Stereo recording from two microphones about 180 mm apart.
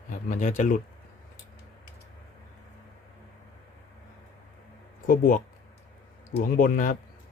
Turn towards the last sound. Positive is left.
turn(degrees=50)  # may be behind; listen again after turning